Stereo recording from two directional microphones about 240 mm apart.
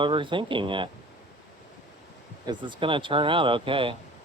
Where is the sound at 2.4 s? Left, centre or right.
Centre.